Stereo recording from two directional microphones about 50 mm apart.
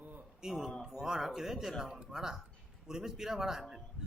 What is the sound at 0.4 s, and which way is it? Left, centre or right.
Speech, centre.